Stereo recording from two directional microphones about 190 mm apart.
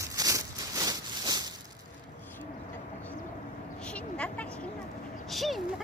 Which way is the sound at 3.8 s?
5° left (ahead or behind).